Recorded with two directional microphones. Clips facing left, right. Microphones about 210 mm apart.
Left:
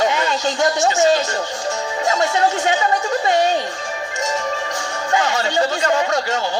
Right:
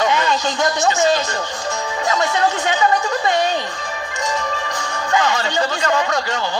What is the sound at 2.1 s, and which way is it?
Speech, 40° left (ahead or behind).